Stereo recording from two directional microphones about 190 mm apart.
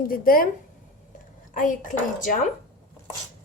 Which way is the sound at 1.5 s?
45° left (ahead or behind).